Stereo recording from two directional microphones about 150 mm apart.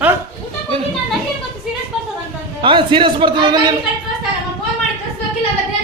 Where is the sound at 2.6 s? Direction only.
35° right (ahead or behind).